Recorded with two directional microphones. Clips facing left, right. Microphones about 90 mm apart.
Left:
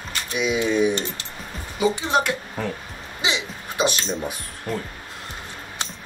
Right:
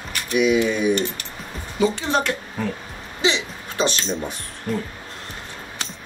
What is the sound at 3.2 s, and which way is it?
Throat clearing, 15° left (ahead or behind).